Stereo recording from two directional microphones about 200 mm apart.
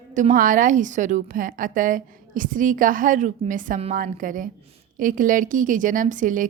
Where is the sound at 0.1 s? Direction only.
40° right (ahead or behind).